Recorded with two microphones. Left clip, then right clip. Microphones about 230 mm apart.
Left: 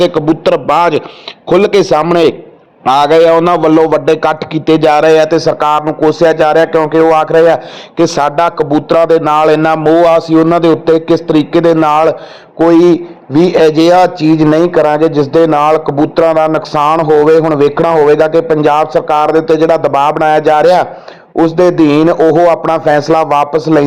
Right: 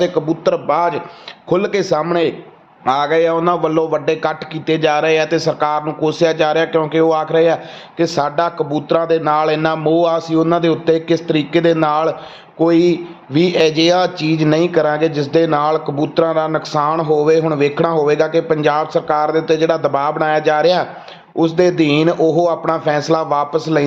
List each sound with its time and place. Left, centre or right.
0.0 s a man's voice: left
7.9 s a man's voice: left